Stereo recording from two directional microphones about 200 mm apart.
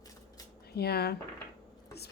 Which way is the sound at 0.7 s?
50° left (ahead or behind).